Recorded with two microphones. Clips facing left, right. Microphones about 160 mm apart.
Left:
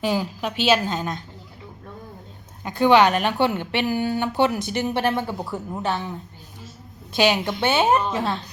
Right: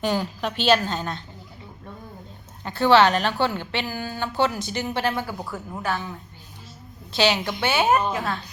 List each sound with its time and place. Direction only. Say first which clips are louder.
0.0 s a woman's voice: left 1 dB; 5° left (ahead or behind)
2.6 s a woman's voice: left 1 dB; 15° left (ahead or behind)
7.2 s speech: left 2 dB; 20° left (ahead or behind)